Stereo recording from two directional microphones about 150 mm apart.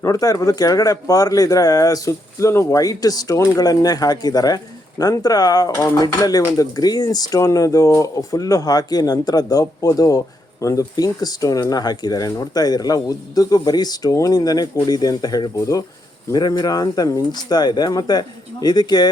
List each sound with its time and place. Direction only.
0.0 s speech: 25° left (ahead or behind)